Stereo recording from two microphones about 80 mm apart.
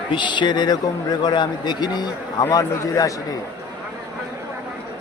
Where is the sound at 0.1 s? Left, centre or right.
Left.